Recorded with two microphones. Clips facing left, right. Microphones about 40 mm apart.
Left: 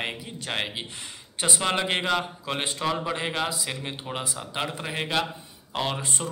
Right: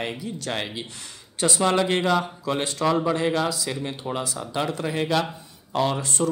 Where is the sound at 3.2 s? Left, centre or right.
Left.